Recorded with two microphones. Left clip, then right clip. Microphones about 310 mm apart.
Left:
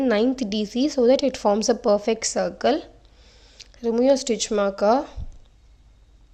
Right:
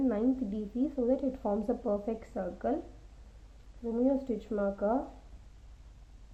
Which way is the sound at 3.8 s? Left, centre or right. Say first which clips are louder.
Left 12 dB; left.